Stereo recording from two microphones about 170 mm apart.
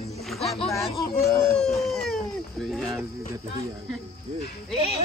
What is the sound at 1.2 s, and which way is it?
Whimper, 15° left (ahead or behind).